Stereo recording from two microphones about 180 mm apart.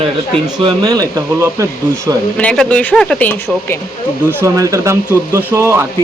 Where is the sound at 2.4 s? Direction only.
5° left (ahead or behind).